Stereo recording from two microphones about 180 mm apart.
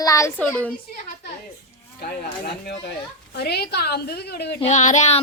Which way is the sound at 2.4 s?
65° left (ahead or behind).